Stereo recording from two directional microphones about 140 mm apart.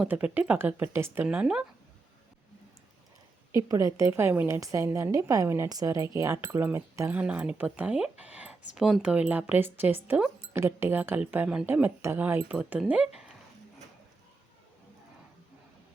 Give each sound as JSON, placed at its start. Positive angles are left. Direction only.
{"t": 0.0, "sound": "speech", "side_deg": -10}
{"t": 3.5, "sound": "a woman's voice", "side_deg": -25}
{"t": 7.2, "sound": "speech", "side_deg": -10}